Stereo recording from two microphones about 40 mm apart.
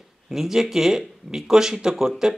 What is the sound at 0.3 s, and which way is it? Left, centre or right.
Speech, centre.